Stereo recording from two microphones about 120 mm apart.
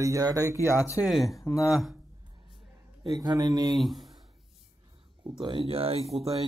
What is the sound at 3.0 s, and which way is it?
Speech, 30° right (ahead or behind).